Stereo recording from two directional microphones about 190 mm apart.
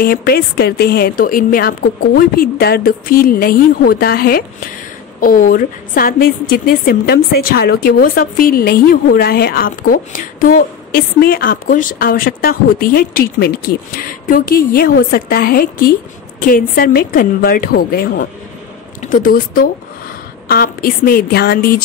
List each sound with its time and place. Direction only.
0.0 s a woman's voice: 50° left (ahead or behind)